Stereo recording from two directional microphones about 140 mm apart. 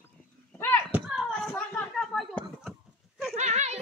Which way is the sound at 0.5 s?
15° left (ahead or behind).